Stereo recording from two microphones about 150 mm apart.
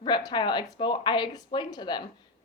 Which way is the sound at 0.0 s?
30° left (ahead or behind).